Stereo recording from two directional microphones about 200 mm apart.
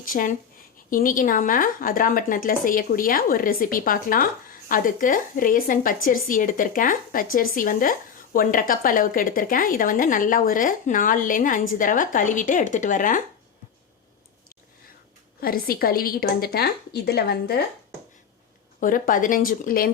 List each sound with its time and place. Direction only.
0.0 s speech: 45° left (ahead or behind)
15.4 s speech: 50° left (ahead or behind)
18.8 s speech: 45° left (ahead or behind)